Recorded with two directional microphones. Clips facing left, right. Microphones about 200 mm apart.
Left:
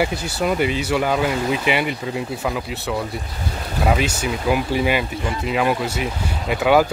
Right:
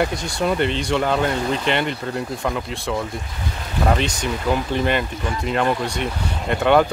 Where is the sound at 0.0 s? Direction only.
5° left (ahead or behind).